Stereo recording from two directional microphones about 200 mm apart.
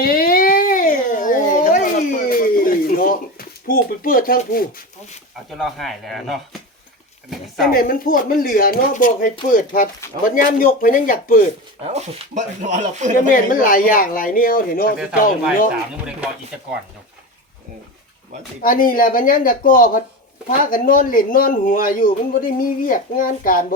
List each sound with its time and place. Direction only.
0.0 s a sound: 45° left (ahead or behind)
5.5 s speech: centre (ahead or behind)
7.7 s speech: 45° left (ahead or behind)
11.9 s speech: 35° right (ahead or behind)
13.2 s speech: 45° left (ahead or behind)
18.6 s speech: 45° left (ahead or behind)